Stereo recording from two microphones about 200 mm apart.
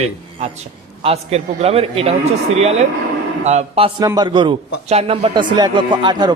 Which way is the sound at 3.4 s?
35° right (ahead or behind).